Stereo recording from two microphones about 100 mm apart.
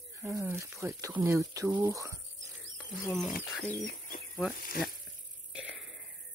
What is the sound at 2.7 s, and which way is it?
Speech, centre (ahead or behind).